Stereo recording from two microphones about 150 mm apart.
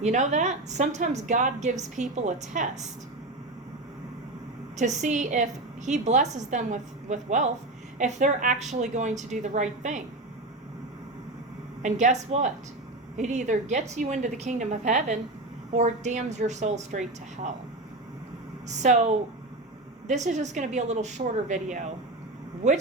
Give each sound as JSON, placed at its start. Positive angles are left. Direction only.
{"t": 0.0, "sound": "a woman's voice", "side_deg": -55}
{"t": 4.9, "sound": "a woman's voice", "side_deg": -55}
{"t": 11.8, "sound": "a woman's voice", "side_deg": -55}
{"t": 18.7, "sound": "a woman's voice", "side_deg": -50}